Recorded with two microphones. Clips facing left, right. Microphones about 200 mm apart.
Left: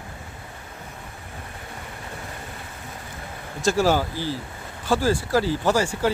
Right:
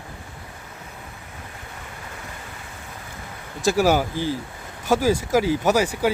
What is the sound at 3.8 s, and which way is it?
Speech, 15° right (ahead or behind).